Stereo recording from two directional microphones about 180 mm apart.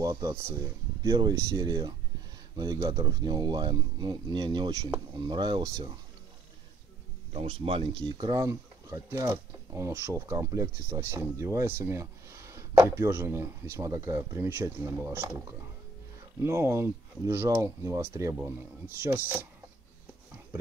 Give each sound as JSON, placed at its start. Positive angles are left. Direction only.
{"t": 0.0, "sound": "speech", "side_deg": -15}
{"t": 7.3, "sound": "speech", "side_deg": -30}